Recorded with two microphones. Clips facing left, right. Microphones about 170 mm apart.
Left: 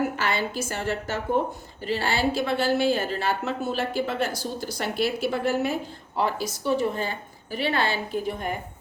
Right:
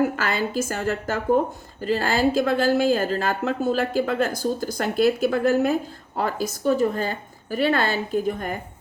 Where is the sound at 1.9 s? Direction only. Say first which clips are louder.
Right 4 dB; 45° right (ahead or behind).